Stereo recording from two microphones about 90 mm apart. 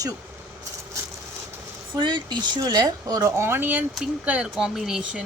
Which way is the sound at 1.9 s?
55° right (ahead or behind).